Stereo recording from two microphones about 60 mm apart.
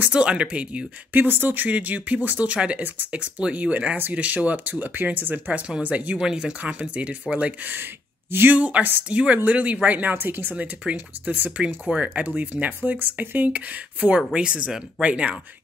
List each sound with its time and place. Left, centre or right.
0.1 s speech: centre
1.2 s speech: right
6.1 s speech: centre
6.6 s speech: right
8.3 s speech: right
8.5 s speech: right